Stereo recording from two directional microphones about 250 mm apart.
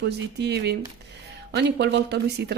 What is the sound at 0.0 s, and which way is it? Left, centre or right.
Speech, right.